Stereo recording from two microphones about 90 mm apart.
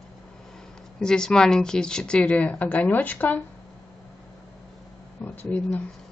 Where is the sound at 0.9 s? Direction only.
10° left (ahead or behind).